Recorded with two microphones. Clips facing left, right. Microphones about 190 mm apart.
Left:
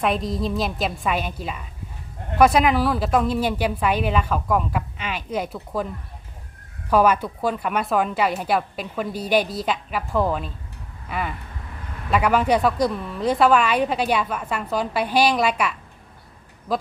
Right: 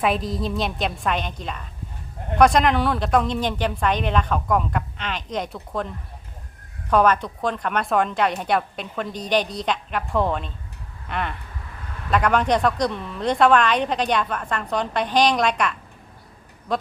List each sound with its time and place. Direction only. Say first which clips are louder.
0.0 s speech: even; centre (ahead or behind)
6.9 s a woman's voice: even; 5° left (ahead or behind)